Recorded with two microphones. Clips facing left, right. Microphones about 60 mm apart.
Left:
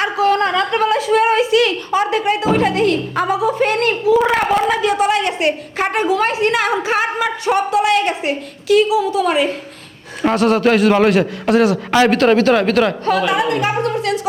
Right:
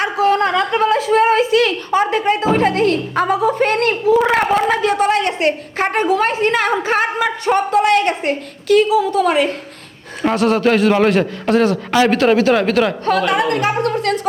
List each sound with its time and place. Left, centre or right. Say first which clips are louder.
0.0 s a sound: even; right
0.4 s a woman's voice: right 1 dB; right
10.2 s a man's voice: left 1 dB; centre
13.1 s a woman's voice: even; right